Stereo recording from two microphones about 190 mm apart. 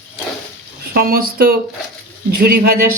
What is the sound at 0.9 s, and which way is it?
Speech, 50° right (ahead or behind).